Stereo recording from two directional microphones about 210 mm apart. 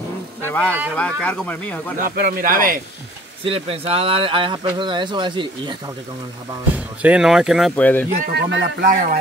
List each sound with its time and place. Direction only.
0.5 s speech: 5° left (ahead or behind)
2.0 s speech: 45° right (ahead or behind)
3.4 s speech: 25° right (ahead or behind)
7.0 s speech: 5° right (ahead or behind)
8.2 s speech: 50° right (ahead or behind)
8.8 s speech: 40° right (ahead or behind)